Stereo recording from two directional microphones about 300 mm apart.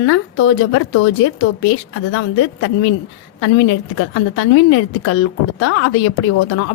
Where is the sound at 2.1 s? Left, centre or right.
Left.